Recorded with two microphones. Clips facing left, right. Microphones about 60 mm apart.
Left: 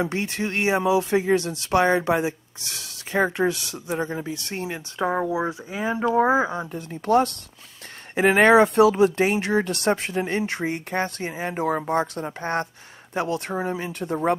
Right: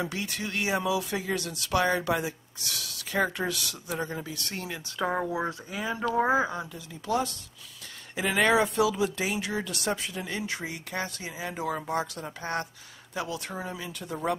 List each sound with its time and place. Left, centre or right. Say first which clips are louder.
0.0 s speech: left 7 dB; left
5.0 s speech: left 5 dB; centre; by 6.7 s left
6.7 s speech: left 9 dB; left